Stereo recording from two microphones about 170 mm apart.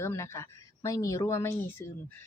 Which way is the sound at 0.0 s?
15° left (ahead or behind).